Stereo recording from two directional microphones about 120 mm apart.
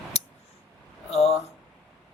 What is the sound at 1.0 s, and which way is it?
Speech, 60° left (ahead or behind).